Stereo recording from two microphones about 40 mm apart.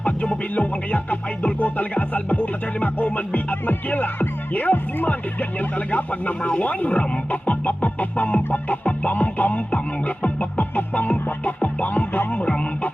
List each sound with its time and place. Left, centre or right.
0.0 s music: left
5.9 s speech: left
10.6 s music: left